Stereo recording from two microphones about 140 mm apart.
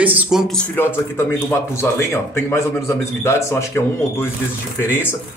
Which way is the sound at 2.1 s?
20° left (ahead or behind).